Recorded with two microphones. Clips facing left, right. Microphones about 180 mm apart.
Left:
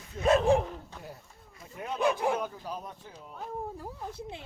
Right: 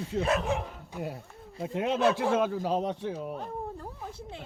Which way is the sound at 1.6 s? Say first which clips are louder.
Right 4 dB; 90° right.